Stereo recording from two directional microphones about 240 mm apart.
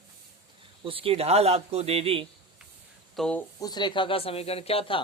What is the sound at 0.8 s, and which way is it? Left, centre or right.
A man's voice, right.